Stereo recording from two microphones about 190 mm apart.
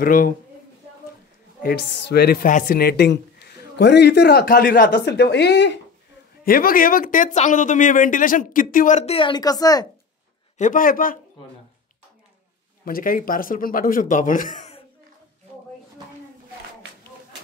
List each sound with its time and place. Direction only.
0.0 s speech: 45° left (ahead or behind)
1.6 s a woman's voice: 55° left (ahead or behind)
6.4 s speech: 50° left (ahead or behind); by 9.8 s 20° left (ahead or behind)
10.6 s speech: 45° left (ahead or behind)
12.8 s speech: 50° left (ahead or behind)